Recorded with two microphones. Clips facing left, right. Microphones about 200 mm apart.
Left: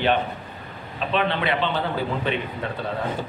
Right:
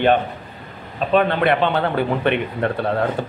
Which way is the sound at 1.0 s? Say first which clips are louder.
Right 7 dB; 45° right (ahead or behind).